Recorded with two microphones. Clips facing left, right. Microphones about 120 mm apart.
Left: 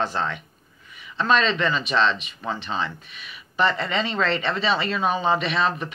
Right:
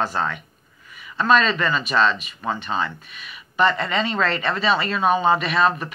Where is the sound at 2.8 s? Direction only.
35° left (ahead or behind).